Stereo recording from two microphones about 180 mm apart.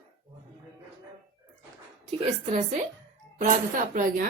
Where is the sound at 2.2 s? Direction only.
35° right (ahead or behind).